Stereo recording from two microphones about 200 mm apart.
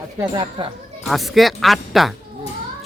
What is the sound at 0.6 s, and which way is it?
Speech, 25° right (ahead or behind).